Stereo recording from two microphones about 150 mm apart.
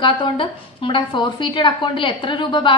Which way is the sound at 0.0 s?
35° left (ahead or behind).